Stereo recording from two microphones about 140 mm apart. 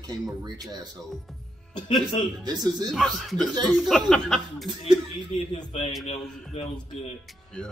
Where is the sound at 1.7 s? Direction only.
35° left (ahead or behind).